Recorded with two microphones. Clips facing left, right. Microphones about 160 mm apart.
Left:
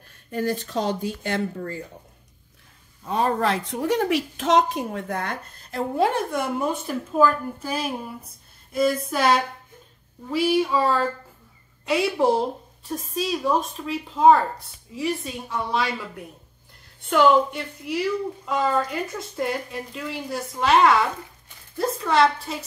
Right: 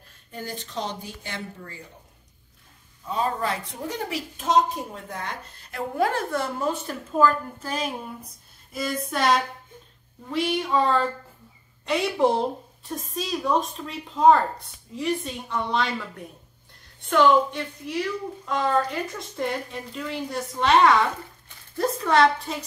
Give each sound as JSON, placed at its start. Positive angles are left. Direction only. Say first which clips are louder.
{"t": 0.3, "sound": "speech", "louder": "left 10 dB", "side_deg": 60}
{"t": 3.1, "sound": "a woman's voice", "louder": "left 4 dB", "side_deg": 85}
{"t": 5.7, "sound": "a woman's voice", "louder": "left 3 dB", "side_deg": 25}
{"t": 17.1, "sound": "a woman's voice", "louder": "left 1 dB", "side_deg": 10}